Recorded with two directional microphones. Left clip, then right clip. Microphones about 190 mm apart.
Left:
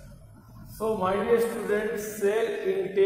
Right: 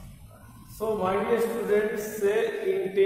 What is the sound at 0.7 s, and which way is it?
A man's voice, 15° left (ahead or behind).